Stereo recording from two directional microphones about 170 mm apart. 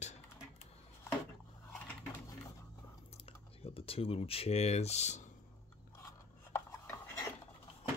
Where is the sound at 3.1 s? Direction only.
35° left (ahead or behind).